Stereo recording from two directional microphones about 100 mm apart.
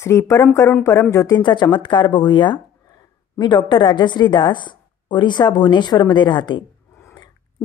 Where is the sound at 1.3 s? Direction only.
50° left (ahead or behind).